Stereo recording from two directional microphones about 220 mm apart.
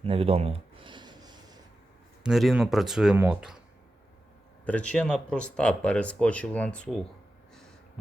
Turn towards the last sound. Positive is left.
turn(degrees=5)  # may be behind; listen again after turning